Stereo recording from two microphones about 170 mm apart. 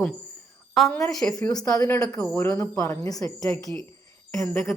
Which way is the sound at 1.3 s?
20° left (ahead or behind).